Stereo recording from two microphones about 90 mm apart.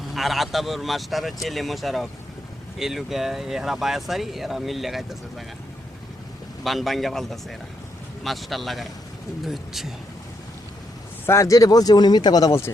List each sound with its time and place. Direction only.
0.0 s speech: centre (ahead or behind)
6.7 s speech: centre (ahead or behind)
11.3 s speech: 35° left (ahead or behind)